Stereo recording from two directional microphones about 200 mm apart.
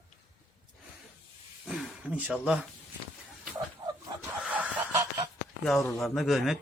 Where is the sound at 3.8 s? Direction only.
25° right (ahead or behind).